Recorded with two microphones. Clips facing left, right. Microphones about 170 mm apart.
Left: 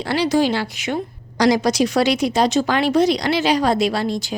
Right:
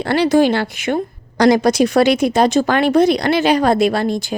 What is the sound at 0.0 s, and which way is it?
A woman's voice, 55° right (ahead or behind).